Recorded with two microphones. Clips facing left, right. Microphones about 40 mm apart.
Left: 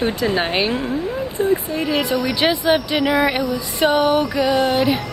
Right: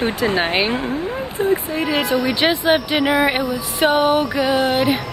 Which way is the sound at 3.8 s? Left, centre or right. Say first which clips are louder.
Even; right.